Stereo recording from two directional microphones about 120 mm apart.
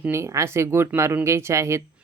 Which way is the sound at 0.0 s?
20° right (ahead or behind).